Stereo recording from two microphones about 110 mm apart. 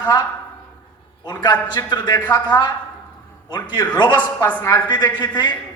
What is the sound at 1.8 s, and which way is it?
Speech, 40° left (ahead or behind).